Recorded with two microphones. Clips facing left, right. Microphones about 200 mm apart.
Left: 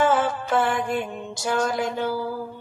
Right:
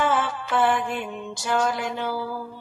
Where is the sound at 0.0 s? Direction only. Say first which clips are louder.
Left 3 dB; 45° left (ahead or behind).